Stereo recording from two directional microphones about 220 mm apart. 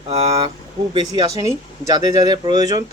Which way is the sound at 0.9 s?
20° right (ahead or behind).